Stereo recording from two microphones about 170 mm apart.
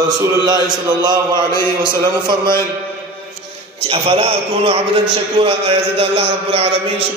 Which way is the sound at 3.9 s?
35° right (ahead or behind).